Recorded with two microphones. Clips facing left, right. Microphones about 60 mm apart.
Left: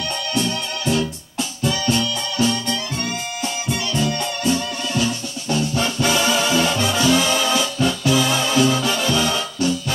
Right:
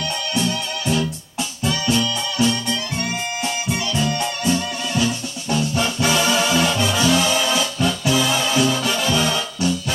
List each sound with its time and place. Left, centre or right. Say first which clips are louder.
0.3 s music: even; centre
5.5 s music: even; centre
8.6 s music: left 1 dB; centre